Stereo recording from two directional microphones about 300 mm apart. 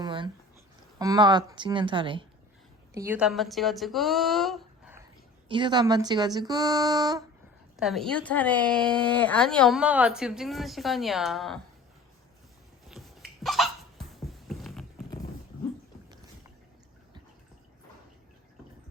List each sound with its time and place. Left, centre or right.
0.0 s a sound: centre
0.9 s a woman's voice: centre
5.5 s speech: centre
7.8 s speech: centre
12.9 s hiccup: centre